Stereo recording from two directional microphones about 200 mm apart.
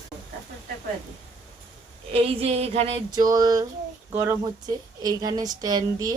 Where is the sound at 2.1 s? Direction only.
30° right (ahead or behind).